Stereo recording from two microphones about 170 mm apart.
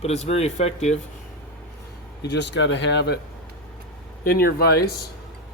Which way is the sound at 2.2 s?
90° left.